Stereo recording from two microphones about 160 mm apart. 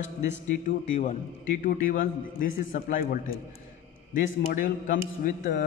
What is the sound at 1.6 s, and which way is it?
A man's voice, 55° left (ahead or behind).